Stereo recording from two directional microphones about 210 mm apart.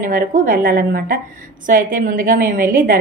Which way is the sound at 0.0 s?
40° right (ahead or behind).